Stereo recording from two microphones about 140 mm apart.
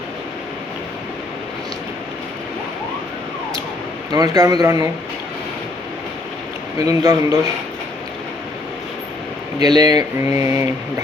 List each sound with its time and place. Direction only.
4.1 s speech: 25° right (ahead or behind)
6.7 s speech: 25° right (ahead or behind)
9.6 s speech: 30° right (ahead or behind)
10.2 s mantra: 20° right (ahead or behind)